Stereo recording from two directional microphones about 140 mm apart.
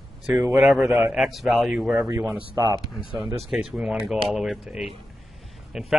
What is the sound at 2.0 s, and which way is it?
Speech, 20° right (ahead or behind).